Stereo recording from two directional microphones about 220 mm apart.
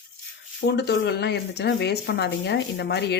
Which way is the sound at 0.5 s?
50° left (ahead or behind).